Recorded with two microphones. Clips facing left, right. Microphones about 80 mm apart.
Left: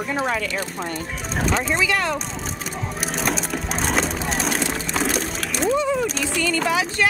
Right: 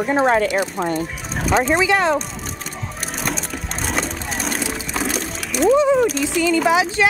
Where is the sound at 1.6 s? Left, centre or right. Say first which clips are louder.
Right 5 dB; right.